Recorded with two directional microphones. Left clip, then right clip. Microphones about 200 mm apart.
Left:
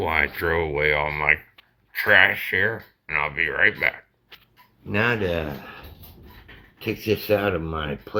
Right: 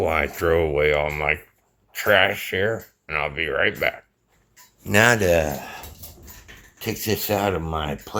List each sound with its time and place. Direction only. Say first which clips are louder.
0.0 s speech: right 1 dB; 40° right (ahead or behind)
4.9 s speech: right 6 dB; 90° right
6.7 s speech: left 1 dB; 45° right (ahead or behind)